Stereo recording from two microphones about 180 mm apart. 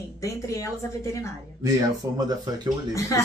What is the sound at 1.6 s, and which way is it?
Speech, 20° right (ahead or behind).